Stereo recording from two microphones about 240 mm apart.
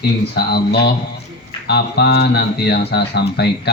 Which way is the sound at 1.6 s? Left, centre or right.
Left.